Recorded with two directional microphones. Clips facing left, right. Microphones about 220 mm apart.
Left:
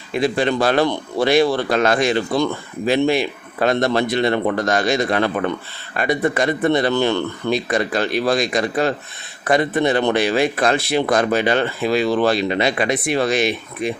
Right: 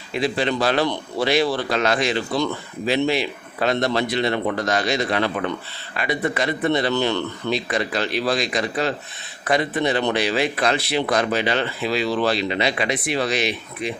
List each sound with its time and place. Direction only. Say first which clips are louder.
0.1 s speech: left 3 dB; 50° left (ahead or behind)